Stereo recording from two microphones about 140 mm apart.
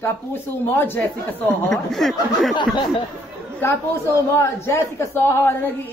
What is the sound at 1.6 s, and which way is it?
Speech, centre (ahead or behind).